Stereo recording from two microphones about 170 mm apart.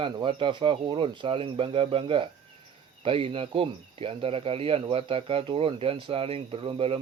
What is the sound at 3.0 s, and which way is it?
Cricket, 30° right (ahead or behind).